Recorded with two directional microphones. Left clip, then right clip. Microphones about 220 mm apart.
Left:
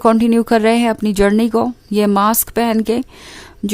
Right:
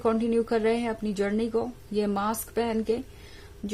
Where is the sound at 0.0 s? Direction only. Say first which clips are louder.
Left 12 dB; 40° left (ahead or behind).